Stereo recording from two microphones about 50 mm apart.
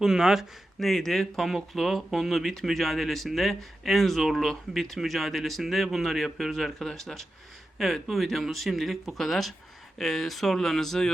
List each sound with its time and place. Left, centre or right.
0.0 s speech: centre
0.8 s speech: centre